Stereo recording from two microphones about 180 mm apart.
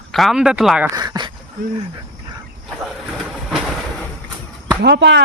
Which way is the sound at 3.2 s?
Centre (ahead or behind).